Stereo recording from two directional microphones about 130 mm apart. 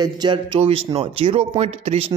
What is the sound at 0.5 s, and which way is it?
Speech, 50° right (ahead or behind).